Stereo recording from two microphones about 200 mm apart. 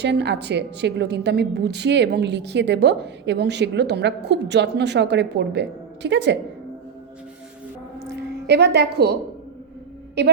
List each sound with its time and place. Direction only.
0.0 s a woman's voice: 60° right (ahead or behind)
8.1 s a woman's voice: 55° right (ahead or behind)
10.2 s a woman's voice: 55° right (ahead or behind)